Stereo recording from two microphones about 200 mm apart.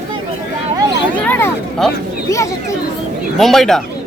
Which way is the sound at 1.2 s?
10° left (ahead or behind).